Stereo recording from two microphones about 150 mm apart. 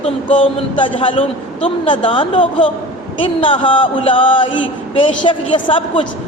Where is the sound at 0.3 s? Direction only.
35° left (ahead or behind).